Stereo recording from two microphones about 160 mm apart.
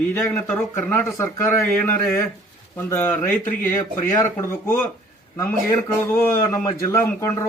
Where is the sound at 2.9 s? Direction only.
15° left (ahead or behind).